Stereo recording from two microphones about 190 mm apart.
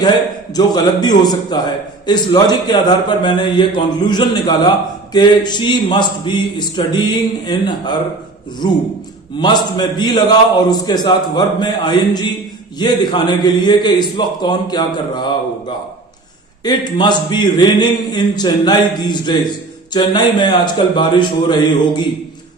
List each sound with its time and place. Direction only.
0.5 s a man's voice: 20° left (ahead or behind)
16.6 s a man's voice: 25° left (ahead or behind)